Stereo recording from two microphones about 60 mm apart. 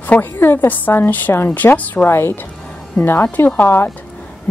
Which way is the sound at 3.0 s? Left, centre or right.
Left.